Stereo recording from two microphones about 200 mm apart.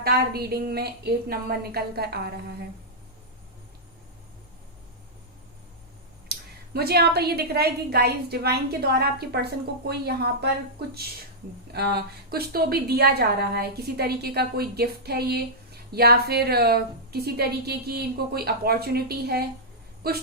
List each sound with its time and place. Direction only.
0.0 s a woman's voice: 50° right (ahead or behind)
6.3 s a sound: 50° right (ahead or behind)
6.7 s a woman's voice: 50° right (ahead or behind)